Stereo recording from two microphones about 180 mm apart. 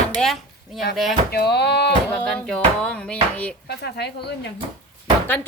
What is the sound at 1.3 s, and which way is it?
Speech, 65° left (ahead or behind).